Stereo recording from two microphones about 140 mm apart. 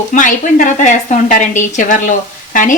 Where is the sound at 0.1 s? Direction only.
65° left (ahead or behind).